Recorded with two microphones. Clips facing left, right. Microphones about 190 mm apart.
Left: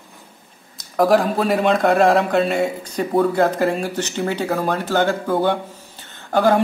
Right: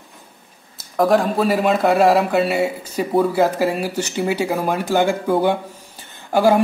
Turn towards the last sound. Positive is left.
turn(degrees=-10)  # may be behind; listen again after turning